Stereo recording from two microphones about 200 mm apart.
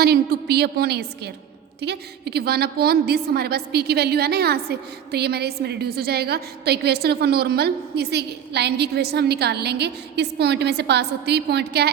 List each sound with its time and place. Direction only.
0.0 s a woman's voice: 55° right (ahead or behind)